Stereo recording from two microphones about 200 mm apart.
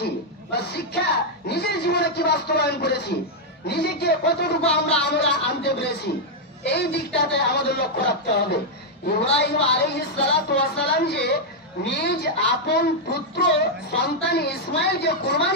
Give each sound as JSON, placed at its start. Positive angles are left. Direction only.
{"t": 0.0, "sound": "a man's voice", "side_deg": 55}